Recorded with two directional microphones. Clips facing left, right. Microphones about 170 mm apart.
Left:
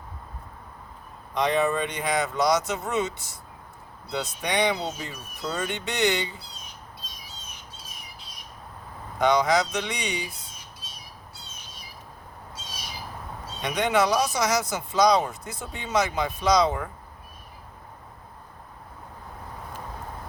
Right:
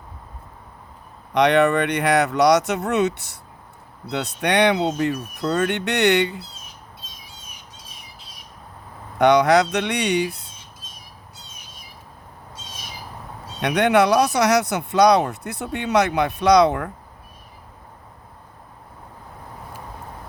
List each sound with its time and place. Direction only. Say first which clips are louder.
1.3 s speech: right 7 dB; 75° right (ahead or behind)
7.3 s squawk: even; 10° right (ahead or behind)
9.1 s speech: right 6 dB; 65° right (ahead or behind)
10.8 s squawk: right 1 dB; 50° right (ahead or behind)
13.6 s speech: right 6 dB; 65° right (ahead or behind)